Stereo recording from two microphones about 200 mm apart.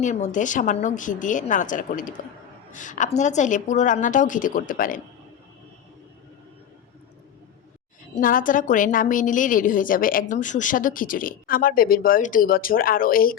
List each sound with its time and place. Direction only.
0.0 s a woman's voice: 35° left (ahead or behind)
8.1 s a woman's voice: 45° left (ahead or behind)